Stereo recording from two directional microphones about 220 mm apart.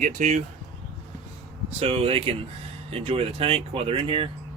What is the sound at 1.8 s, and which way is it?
Speech, 25° right (ahead or behind).